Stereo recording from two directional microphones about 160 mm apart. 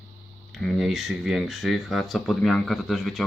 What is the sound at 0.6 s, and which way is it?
Speech, centre (ahead or behind).